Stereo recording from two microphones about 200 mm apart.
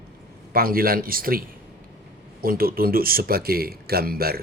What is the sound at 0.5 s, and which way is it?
Speech, 50° right (ahead or behind).